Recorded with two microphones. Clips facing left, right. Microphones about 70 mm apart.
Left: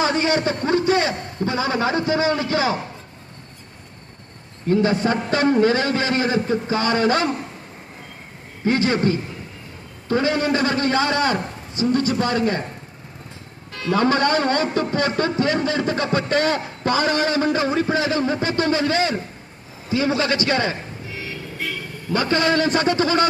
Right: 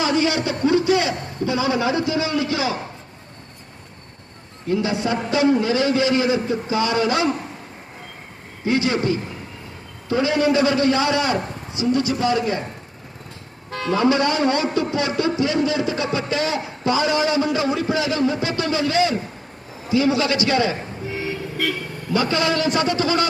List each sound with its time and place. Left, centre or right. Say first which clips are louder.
0.0 s a man's voice: left 1 dB; left
4.7 s a man's voice: left 3 dB; left
8.6 s a man's voice: left 1 dB; left
13.7 s music: right 2 dB; right
13.9 s a man's voice: left 1 dB; left
22.1 s a man's voice: left 1 dB; left